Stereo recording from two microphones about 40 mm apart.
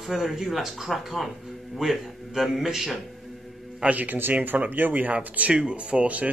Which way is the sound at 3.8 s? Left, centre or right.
Right.